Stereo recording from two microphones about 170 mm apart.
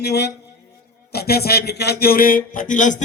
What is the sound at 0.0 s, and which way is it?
A man's voice, 75° left (ahead or behind).